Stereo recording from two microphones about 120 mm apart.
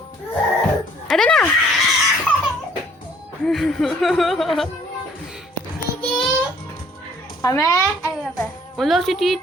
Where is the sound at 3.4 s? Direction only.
5° left (ahead or behind).